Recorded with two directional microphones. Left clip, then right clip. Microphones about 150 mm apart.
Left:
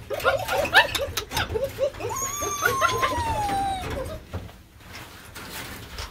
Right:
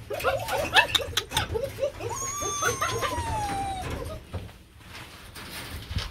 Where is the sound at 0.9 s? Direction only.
5° left (ahead or behind).